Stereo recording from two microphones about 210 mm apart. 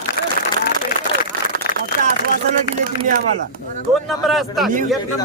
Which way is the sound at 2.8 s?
40° right (ahead or behind).